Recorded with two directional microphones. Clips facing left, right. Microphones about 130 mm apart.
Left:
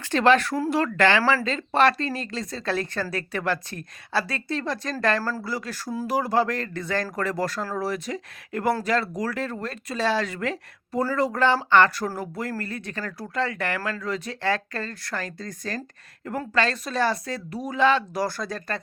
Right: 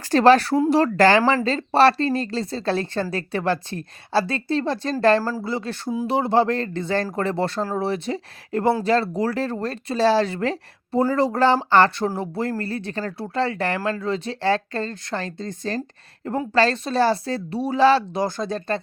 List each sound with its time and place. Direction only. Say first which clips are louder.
0.0 s a woman's voice: right 5 dB; 35° right (ahead or behind)
5.2 s a woman's voice: right 4 dB; 20° right (ahead or behind); by 18.2 s 35° right (ahead or behind)
18.2 s a woman's voice: right 4 dB; 20° right (ahead or behind)